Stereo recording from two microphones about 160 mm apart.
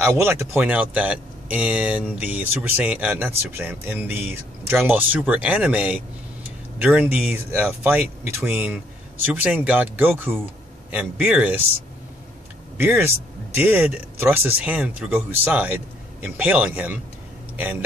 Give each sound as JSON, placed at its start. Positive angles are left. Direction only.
{"t": 0.0, "sound": "speech", "side_deg": -15}
{"t": 12.7, "sound": "speech", "side_deg": -10}